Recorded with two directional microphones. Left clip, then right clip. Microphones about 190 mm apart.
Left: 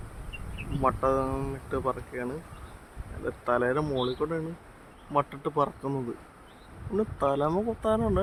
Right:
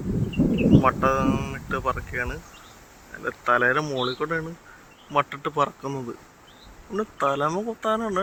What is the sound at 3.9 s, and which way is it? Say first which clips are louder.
Speech: right 3 dB; 15° right (ahead or behind).